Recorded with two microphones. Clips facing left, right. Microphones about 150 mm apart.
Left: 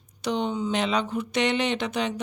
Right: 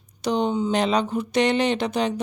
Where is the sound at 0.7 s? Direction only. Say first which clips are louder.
Right 4 dB; 40° right (ahead or behind).